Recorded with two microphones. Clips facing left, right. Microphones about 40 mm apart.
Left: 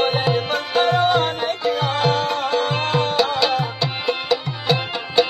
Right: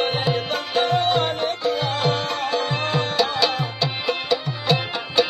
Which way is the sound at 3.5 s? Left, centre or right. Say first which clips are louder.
Left 3 dB; centre.